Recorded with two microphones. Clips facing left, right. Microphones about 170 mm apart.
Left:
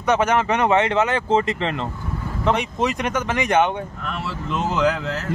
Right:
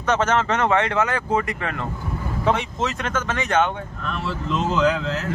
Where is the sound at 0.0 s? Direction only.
15° left (ahead or behind).